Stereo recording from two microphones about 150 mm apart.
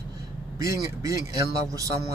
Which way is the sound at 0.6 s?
20° right (ahead or behind).